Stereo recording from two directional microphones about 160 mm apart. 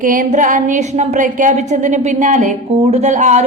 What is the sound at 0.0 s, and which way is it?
A woman's voice, 55° right (ahead or behind).